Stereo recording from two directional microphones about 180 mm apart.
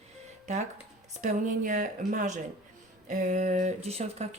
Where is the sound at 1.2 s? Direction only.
45° right (ahead or behind).